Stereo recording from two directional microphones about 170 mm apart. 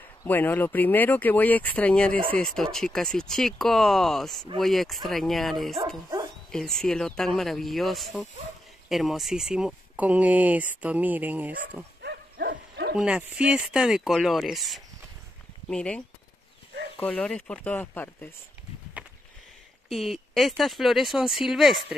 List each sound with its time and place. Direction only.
0.2 s speech: 10° left (ahead or behind); by 11.5 s 10° right (ahead or behind)
12.0 s dog: 75° right (ahead or behind)
12.9 s speech: 5° right (ahead or behind)
17.0 s speech: 5° left (ahead or behind)
19.9 s speech: centre (ahead or behind)